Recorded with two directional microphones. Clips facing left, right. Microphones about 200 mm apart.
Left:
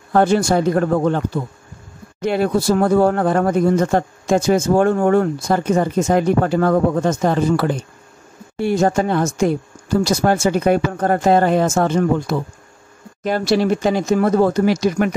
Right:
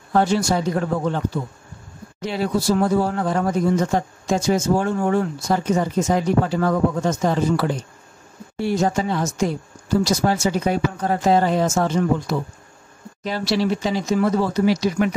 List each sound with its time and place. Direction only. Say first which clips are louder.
0.1 s speech: left 4 dB; 55° left (ahead or behind)
2.2 s speech: left 4 dB; 55° left (ahead or behind)